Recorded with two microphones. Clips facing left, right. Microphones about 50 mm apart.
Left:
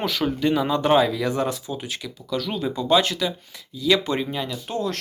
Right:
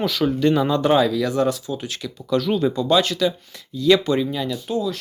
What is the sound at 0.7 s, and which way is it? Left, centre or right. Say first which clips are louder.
Speech: right 1 dB; centre.